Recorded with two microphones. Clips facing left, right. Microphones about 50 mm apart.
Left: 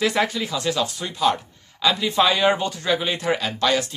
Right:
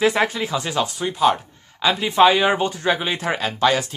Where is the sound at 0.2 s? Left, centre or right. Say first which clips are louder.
Right 2 dB; right.